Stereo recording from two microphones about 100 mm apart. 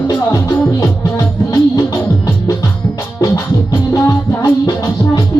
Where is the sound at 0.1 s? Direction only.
35° left (ahead or behind).